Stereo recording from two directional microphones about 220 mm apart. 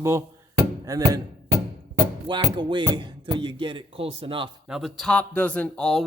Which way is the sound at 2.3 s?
20° right (ahead or behind).